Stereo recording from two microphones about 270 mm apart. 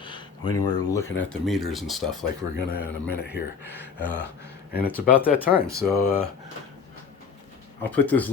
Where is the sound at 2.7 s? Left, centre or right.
Left.